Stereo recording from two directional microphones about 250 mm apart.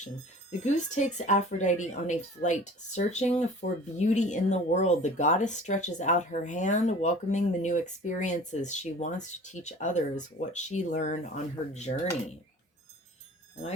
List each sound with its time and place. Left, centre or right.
0.6 s speech: left